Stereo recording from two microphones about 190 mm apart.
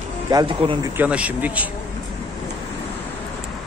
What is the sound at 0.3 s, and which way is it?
Speech, 25° right (ahead or behind).